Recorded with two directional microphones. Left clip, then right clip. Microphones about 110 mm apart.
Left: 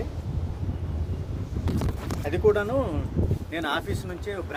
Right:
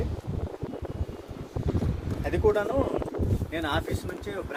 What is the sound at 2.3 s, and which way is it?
Speech, 90° left.